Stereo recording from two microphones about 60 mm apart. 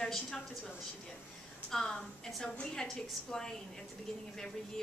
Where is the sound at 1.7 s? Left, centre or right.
Centre.